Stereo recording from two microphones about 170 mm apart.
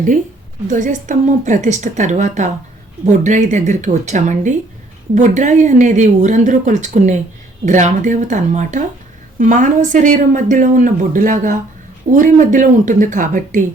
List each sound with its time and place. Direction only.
0.7 s a woman's voice: 50° right (ahead or behind)